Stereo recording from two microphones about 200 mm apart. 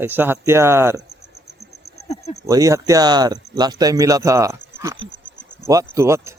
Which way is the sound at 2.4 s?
15° right (ahead or behind).